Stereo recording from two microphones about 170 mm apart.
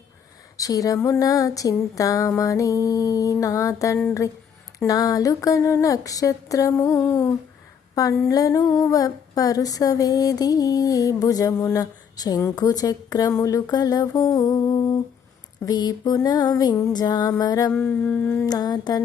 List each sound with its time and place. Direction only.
0.5 s humming: 20° left (ahead or behind)
17.7 s humming: 10° left (ahead or behind)
18.4 s humming: 25° left (ahead or behind)